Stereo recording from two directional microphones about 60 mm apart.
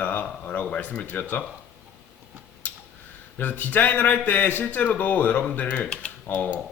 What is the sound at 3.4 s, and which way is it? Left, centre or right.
Speech, left.